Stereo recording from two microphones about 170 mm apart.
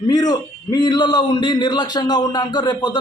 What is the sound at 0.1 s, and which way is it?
A man's voice, 25° left (ahead or behind).